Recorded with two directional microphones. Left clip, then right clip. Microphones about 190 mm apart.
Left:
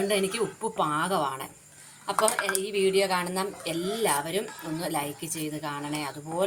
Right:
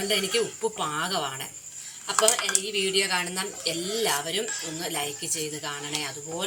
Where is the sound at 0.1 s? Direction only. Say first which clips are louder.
Right 2 dB; 60° left (ahead or behind).